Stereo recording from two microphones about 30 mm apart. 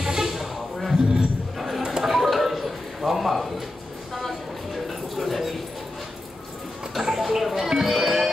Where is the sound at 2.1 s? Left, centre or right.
Centre.